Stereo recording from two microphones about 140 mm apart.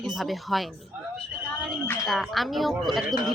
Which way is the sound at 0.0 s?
Centre (ahead or behind).